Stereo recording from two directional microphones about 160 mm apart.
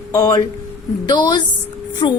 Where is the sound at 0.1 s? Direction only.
20° left (ahead or behind).